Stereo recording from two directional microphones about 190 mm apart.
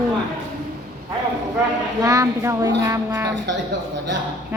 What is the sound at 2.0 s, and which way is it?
A woman's voice, 15° right (ahead or behind).